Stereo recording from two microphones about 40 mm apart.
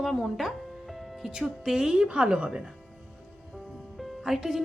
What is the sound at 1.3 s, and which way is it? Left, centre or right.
A woman's voice, centre.